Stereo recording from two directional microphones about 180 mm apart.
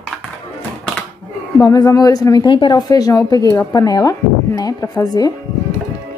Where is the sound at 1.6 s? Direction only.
20° left (ahead or behind).